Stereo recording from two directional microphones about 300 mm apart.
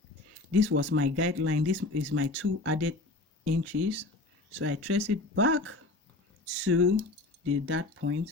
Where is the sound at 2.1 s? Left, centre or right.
Right.